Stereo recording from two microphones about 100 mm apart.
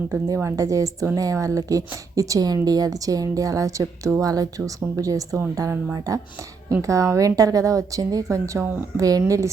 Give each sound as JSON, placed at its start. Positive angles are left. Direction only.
{"t": 0.3, "sound": "a woman's voice", "side_deg": -35}